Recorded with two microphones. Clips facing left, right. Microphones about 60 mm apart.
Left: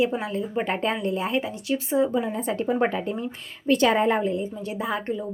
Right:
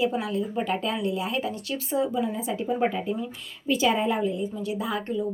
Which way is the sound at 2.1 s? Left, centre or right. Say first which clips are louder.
Left 2 dB; left.